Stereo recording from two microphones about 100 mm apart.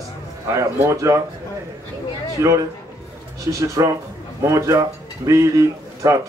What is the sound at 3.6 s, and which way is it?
A man's voice, 35° right (ahead or behind).